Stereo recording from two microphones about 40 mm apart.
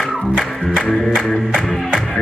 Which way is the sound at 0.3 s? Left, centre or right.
Centre.